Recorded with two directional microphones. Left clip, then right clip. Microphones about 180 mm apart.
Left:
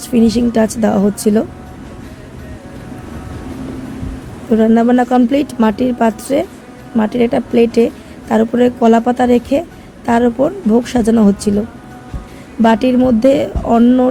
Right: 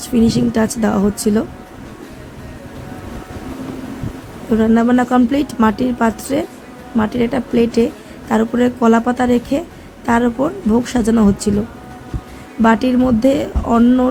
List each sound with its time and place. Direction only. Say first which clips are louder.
0.1 s a woman's voice: left 3 dB; 20° left (ahead or behind)
4.5 s a woman's voice: left 3 dB; 20° left (ahead or behind)
12.6 s a woman's voice: left 2 dB; 20° left (ahead or behind)